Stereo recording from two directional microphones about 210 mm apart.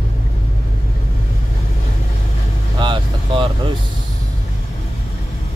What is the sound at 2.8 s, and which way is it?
Vehicle, 20° right (ahead or behind).